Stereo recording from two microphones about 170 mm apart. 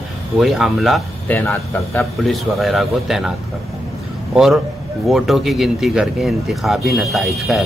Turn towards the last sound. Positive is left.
turn(degrees=0)  # may be behind; listen again after turning